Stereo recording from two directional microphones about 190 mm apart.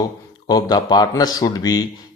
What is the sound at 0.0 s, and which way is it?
Speech, 20° left (ahead or behind).